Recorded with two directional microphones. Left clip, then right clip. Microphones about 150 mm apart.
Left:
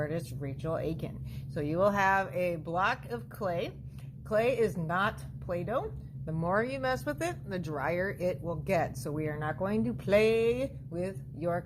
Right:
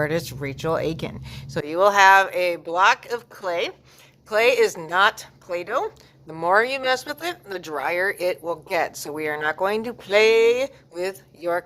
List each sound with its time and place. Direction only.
0.0 s speech: 45° right (ahead or behind)